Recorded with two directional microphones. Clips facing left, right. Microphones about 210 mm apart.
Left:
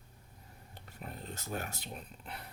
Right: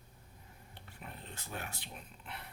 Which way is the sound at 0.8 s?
40° left (ahead or behind).